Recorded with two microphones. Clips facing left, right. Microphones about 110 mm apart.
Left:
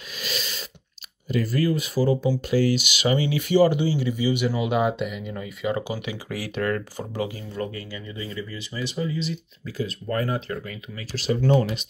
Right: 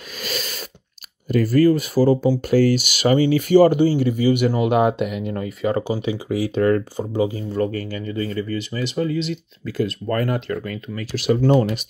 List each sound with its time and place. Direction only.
0.2 s a sound: 45° right (ahead or behind)
1.3 s speech: 45° right (ahead or behind)
6.1 s speech: 20° right (ahead or behind)
7.5 s speech: 45° right (ahead or behind)